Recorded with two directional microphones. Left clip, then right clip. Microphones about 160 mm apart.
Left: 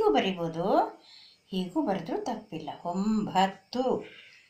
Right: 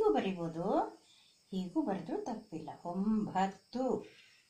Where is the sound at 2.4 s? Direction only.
20° left (ahead or behind).